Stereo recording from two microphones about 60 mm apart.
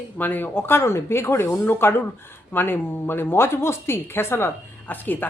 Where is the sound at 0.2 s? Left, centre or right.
Left.